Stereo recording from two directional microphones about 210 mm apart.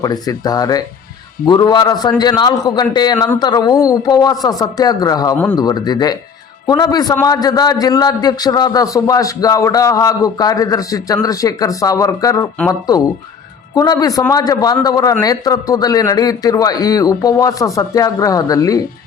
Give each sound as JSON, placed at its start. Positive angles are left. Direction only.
{"t": 0.0, "sound": "a man's voice", "side_deg": 20}